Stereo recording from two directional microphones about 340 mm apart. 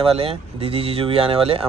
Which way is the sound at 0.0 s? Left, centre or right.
Centre.